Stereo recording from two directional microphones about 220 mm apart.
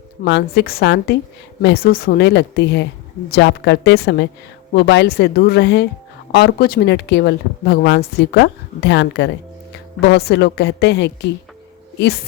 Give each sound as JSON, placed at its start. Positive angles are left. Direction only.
{"t": 0.3, "sound": "speech", "side_deg": 50}